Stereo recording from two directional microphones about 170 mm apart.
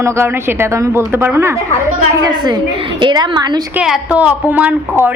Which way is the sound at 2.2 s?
25° right (ahead or behind).